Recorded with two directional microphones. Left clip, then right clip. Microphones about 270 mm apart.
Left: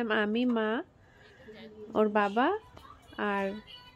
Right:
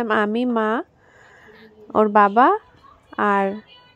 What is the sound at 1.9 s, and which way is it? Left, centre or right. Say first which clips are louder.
A woman's voice: right 12 dB; centre.